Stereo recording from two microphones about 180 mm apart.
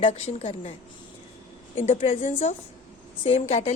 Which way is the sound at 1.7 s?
35° left (ahead or behind).